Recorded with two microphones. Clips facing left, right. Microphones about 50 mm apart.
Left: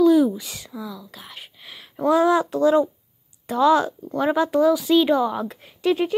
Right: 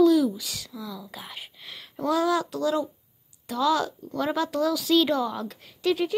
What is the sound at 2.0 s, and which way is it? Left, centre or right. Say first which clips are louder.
A child's voice: left 6 dB; left.